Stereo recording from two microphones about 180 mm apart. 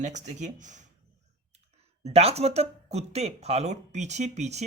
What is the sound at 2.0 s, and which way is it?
Speech, 35° right (ahead or behind).